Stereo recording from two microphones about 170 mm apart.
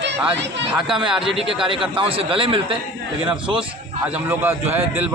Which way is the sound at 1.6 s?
30° right (ahead or behind).